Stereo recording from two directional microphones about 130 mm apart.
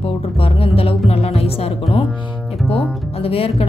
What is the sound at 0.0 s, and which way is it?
Music, 50° left (ahead or behind).